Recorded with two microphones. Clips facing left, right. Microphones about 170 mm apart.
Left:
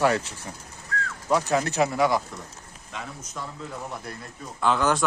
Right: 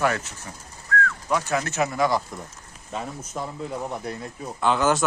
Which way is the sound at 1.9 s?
10° left (ahead or behind).